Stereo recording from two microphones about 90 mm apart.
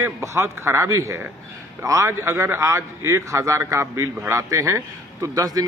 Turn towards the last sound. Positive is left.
turn(degrees=-40)  # may be behind; listen again after turning